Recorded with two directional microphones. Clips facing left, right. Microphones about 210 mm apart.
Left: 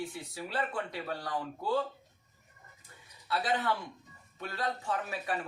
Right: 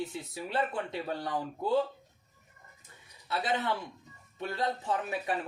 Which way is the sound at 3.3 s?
20° right (ahead or behind).